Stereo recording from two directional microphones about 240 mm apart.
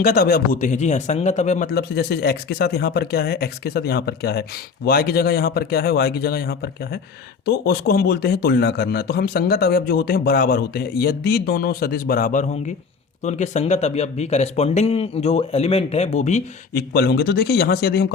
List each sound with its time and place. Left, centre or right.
0.0 s speech: left
16.9 s speech: left